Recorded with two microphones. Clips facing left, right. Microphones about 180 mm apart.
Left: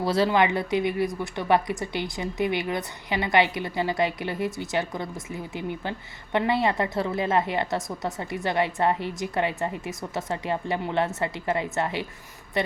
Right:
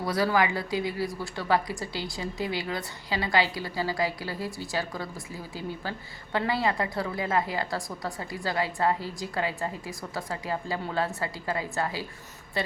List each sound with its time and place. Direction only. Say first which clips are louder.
0.0 s speech: left 3 dB; 25° left (ahead or behind)